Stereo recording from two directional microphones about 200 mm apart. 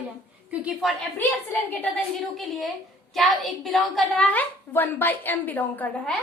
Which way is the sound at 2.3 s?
Centre (ahead or behind).